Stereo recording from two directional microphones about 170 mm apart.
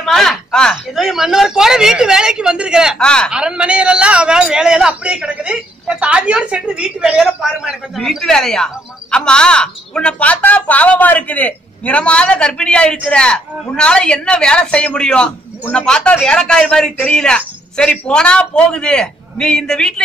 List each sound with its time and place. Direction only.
0.0 s speech: centre (ahead or behind)
3.3 s speech: 5° right (ahead or behind)